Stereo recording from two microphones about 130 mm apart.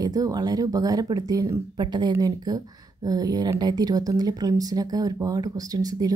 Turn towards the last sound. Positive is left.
turn(degrees=-30)  # may be behind; listen again after turning